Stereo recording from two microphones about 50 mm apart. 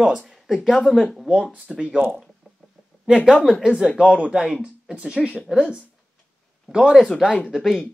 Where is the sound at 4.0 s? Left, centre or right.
Right.